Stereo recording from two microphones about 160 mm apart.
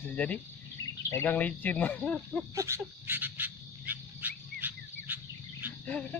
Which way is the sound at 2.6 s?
15° right (ahead or behind).